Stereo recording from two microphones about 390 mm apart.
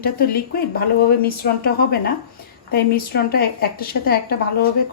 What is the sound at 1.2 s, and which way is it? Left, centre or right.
A woman's voice, left.